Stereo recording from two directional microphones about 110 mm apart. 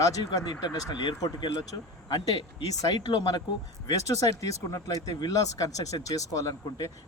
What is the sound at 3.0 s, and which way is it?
Speech, 35° left (ahead or behind).